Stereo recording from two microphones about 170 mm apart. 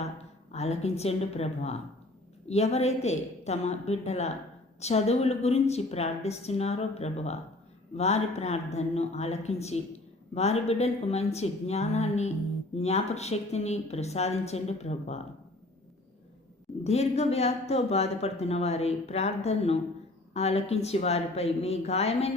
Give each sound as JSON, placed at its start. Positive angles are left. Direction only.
{"t": 0.5, "sound": "speech", "side_deg": 40}
{"t": 16.8, "sound": "speech", "side_deg": 40}